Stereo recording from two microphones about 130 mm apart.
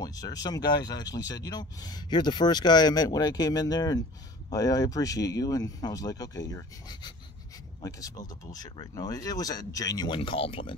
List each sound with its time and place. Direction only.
0.0 s speech: 30° left (ahead or behind)